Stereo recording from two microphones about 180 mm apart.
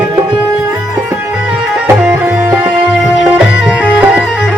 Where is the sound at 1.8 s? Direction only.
10° right (ahead or behind).